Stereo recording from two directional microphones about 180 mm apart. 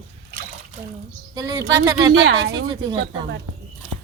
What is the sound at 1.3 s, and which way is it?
Speech, 20° right (ahead or behind).